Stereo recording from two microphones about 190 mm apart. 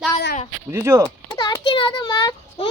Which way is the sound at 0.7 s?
15° right (ahead or behind).